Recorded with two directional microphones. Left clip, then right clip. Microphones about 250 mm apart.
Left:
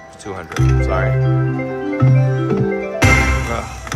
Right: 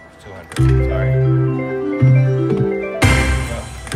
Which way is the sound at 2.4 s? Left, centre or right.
Centre.